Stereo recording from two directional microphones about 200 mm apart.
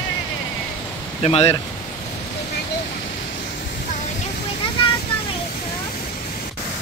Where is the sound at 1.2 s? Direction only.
30° left (ahead or behind).